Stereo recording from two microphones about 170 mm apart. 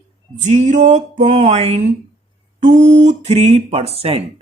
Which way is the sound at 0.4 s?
45° right (ahead or behind).